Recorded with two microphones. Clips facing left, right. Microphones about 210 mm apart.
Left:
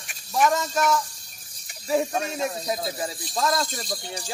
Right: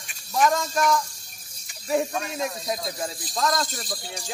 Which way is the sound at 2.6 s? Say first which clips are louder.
Left 1 dB; 5° left (ahead or behind).